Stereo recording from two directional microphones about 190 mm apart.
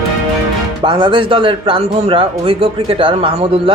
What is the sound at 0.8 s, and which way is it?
Speech, 25° right (ahead or behind).